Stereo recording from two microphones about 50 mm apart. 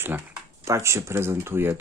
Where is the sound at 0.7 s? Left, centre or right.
Right.